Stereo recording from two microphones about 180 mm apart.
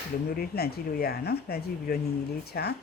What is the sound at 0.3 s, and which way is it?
Speech, 60° left (ahead or behind).